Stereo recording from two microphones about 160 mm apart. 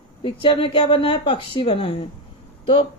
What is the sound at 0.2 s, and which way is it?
Speech, 35° left (ahead or behind).